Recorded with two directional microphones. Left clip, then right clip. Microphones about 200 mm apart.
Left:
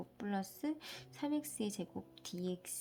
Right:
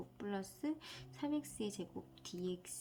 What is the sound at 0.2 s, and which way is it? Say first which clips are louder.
A woman's voice: left 2 dB; 35° left (ahead or behind).